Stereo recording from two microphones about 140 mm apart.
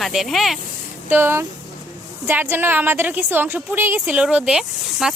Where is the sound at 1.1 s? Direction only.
15° right (ahead or behind).